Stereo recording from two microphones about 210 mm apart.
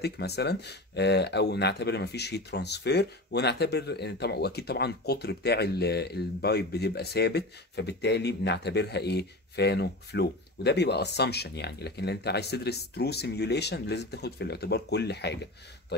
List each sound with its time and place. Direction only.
0.0 s speech: 50° left (ahead or behind)